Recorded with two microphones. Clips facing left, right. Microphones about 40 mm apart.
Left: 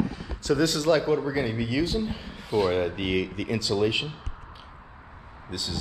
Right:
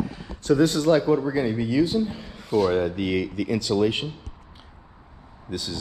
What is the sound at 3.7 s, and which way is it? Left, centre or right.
Speech, right.